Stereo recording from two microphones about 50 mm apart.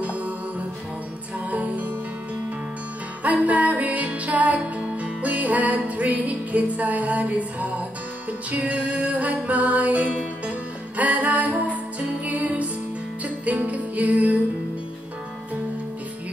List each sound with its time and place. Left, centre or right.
0.0 s music: right
1.5 s music: right
3.3 s music: right